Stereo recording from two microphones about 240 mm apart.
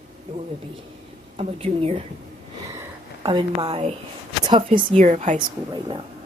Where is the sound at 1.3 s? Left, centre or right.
Right.